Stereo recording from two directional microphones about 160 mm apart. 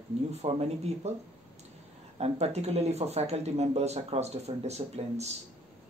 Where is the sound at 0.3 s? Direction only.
40° right (ahead or behind).